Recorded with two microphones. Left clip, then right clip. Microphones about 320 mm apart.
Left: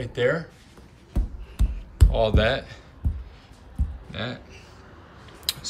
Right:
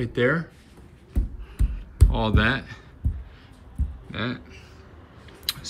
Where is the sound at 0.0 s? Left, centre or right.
Centre.